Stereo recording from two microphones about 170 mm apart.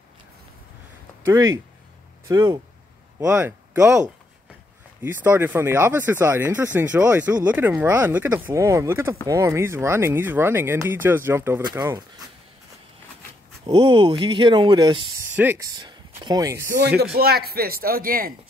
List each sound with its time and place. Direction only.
1.2 s speech: 20° right (ahead or behind)
5.0 s speech: 10° right (ahead or behind)
13.7 s speech: 30° right (ahead or behind)
15.3 s speech: 10° right (ahead or behind)
17.0 s speech: 70° right (ahead or behind)